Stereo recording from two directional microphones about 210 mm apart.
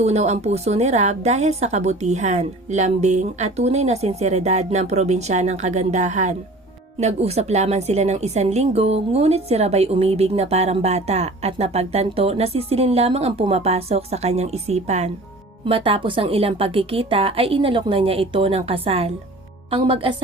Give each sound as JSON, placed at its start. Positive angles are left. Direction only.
{"t": 0.0, "sound": "a woman's voice", "side_deg": -30}